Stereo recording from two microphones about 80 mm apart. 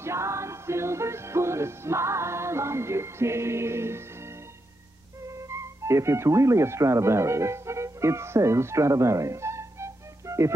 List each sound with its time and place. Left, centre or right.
0.0 s music: right
5.2 s speech: right